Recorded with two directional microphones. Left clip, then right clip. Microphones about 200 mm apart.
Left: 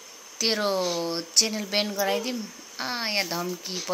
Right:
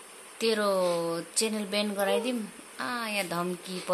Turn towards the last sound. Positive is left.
turn(degrees=-5)  # may be behind; listen again after turning